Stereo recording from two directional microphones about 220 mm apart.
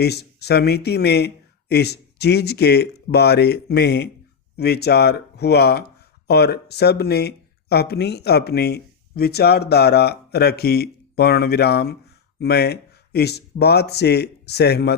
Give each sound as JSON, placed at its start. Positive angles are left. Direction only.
{"t": 0.0, "sound": "speech", "side_deg": 50}